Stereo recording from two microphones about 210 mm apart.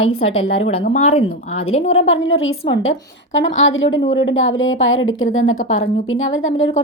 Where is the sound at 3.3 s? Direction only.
65° left (ahead or behind).